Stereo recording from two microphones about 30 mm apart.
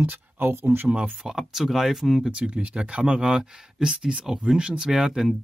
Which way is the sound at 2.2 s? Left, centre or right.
Right.